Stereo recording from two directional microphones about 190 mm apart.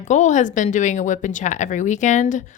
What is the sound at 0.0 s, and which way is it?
Speech, 40° left (ahead or behind).